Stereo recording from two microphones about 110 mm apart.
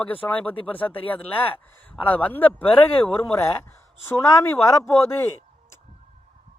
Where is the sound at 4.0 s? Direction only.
25° left (ahead or behind).